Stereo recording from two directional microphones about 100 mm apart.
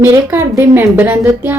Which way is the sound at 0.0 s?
25° right (ahead or behind).